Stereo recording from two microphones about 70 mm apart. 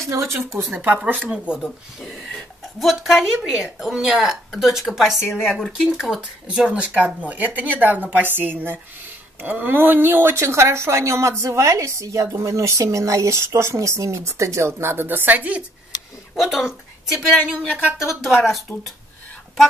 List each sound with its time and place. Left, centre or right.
0.1 s speech: right
1.0 s a woman's voice: right
1.6 s a woman's voice: centre; by 15.6 s right
16.3 s a woman's voice: centre
18.2 s a woman's voice: centre